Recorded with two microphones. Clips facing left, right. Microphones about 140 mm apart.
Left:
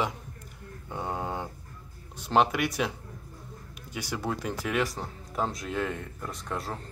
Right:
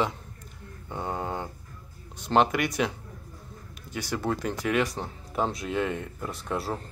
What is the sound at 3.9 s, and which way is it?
Speech, 10° left (ahead or behind).